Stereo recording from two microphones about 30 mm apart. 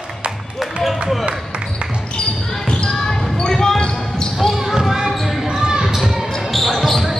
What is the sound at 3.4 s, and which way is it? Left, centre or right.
Basketball bounce, centre.